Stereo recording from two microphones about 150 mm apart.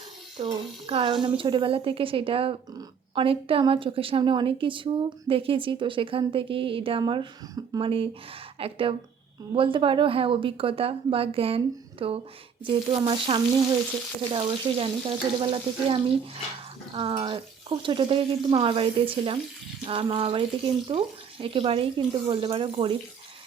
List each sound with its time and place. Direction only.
0.3 s a woman's voice: 35° right (ahead or behind)